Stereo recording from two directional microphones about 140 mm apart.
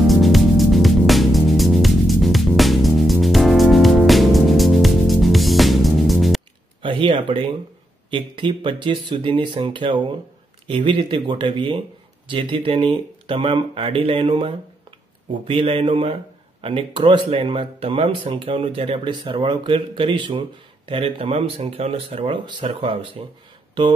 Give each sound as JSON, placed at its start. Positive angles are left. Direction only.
{"t": 0.0, "sound": "music", "side_deg": 0}
{"t": 6.8, "sound": "a sound", "side_deg": -35}
{"t": 7.2, "sound": "speech", "side_deg": -40}